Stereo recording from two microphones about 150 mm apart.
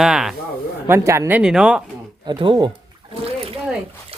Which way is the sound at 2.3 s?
30° right (ahead or behind).